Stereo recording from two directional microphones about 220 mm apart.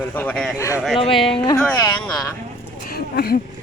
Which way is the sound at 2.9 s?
45° left (ahead or behind).